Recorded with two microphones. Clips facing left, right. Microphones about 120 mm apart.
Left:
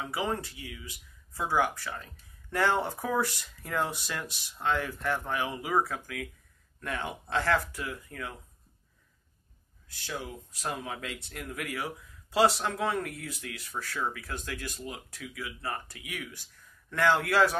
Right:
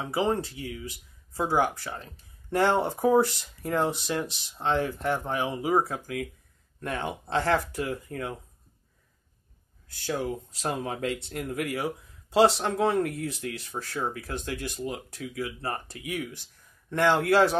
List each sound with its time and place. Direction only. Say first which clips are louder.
0.0 s speech: right 6 dB; 30° right (ahead or behind)
7.8 s speech: right 6 dB; 40° right (ahead or behind)
9.9 s speech: right 8 dB; 40° right (ahead or behind)
16.9 s speech: right 4 dB; 25° right (ahead or behind)